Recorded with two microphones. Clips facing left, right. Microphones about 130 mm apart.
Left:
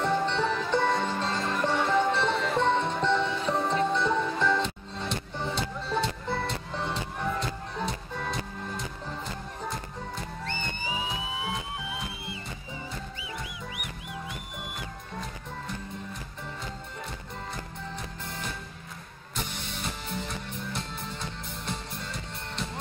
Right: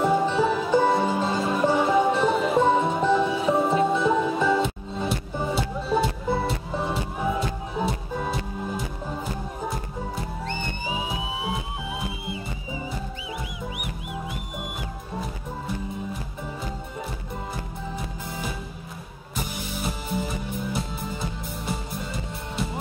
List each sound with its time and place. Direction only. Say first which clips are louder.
0.0 s music: right 5 dB; 5° right (ahead or behind)
14.6 s music: right 5 dB; 10° right (ahead or behind)
19.3 s music: right 5 dB; 5° right (ahead or behind)